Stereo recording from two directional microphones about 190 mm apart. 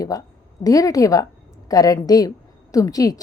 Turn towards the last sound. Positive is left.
turn(degrees=20)  # may be behind; listen again after turning